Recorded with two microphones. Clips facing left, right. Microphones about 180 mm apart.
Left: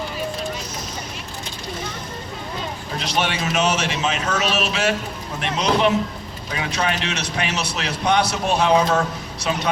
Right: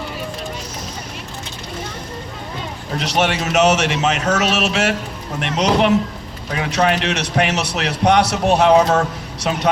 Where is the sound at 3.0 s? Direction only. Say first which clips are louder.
Right 4 dB; 70° right (ahead or behind).